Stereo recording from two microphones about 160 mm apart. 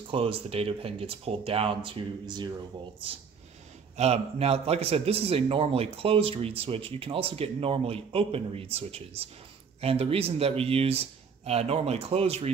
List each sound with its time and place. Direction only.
0.1 s a man's voice: 35° right (ahead or behind)
3.9 s a man's voice: 40° right (ahead or behind)